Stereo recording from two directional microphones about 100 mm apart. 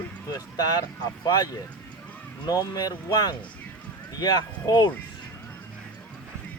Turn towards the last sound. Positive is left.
turn(degrees=45)  # may be behind; listen again after turning